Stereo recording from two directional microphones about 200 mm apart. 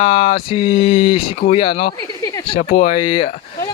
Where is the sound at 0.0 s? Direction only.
25° left (ahead or behind).